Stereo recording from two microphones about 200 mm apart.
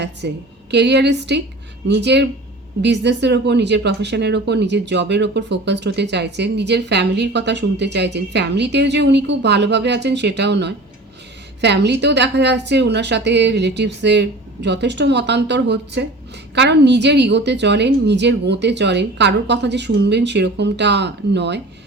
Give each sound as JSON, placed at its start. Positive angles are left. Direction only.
{"t": 0.2, "sound": "speech", "side_deg": -55}